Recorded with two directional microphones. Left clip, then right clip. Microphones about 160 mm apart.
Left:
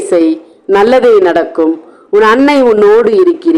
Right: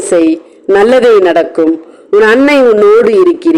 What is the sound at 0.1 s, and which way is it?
Speech, 20° right (ahead or behind).